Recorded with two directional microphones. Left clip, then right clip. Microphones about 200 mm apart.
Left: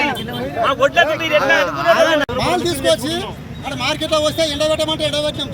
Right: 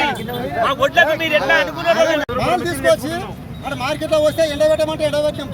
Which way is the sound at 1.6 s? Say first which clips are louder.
Left 2 dB; 40° left (ahead or behind).